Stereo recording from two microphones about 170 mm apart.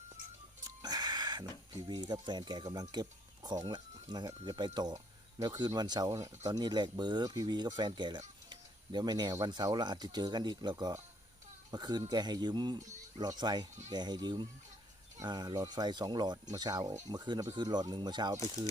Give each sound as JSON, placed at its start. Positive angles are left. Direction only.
{"t": 0.8, "sound": "music", "side_deg": -25}
{"t": 1.9, "sound": "speech", "side_deg": -25}